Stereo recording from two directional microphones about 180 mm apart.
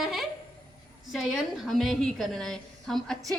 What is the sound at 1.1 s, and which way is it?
A woman's voice, centre (ahead or behind).